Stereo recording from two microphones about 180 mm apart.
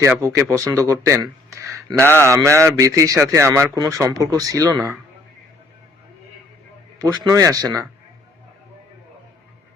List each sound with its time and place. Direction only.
0.0 s speech: 15° right (ahead or behind)
7.0 s speech: 20° right (ahead or behind)